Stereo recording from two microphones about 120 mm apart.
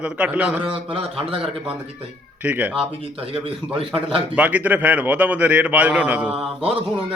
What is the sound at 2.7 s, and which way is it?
A man's voice, 50° right (ahead or behind).